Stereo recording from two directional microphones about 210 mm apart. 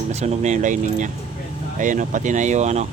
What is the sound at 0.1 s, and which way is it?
Speech, 30° right (ahead or behind).